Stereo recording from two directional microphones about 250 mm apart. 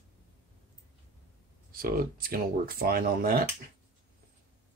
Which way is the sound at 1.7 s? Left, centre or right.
Right.